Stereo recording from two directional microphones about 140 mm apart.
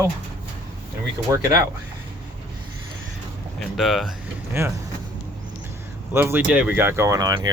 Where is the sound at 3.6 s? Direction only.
Centre (ahead or behind).